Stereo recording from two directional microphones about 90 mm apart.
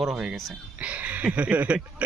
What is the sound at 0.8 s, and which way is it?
Speech, 15° right (ahead or behind).